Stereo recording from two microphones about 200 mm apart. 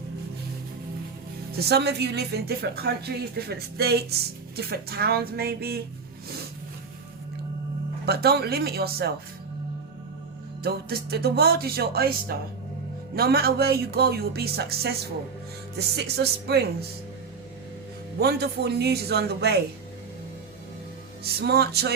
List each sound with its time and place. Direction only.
1.5 s a woman's voice: 55° right (ahead or behind)
8.0 s a woman's voice: 50° right (ahead or behind)
10.6 s a woman's voice: 50° right (ahead or behind)
16.0 s speech: 55° right (ahead or behind)
18.2 s a woman's voice: 55° right (ahead or behind)
21.3 s speech: 55° right (ahead or behind)